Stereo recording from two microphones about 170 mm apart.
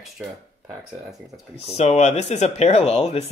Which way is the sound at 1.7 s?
40° left (ahead or behind).